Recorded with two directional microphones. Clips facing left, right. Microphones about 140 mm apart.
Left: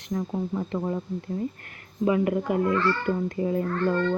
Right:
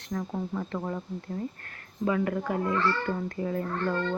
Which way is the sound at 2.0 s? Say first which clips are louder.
Left 4 dB; 15° left (ahead or behind).